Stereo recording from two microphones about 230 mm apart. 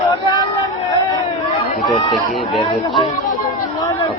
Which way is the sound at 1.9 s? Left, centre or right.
Centre.